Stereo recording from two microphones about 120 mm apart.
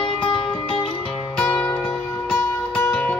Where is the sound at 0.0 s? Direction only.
45° left (ahead or behind).